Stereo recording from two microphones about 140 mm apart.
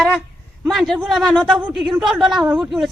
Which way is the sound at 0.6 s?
Centre (ahead or behind).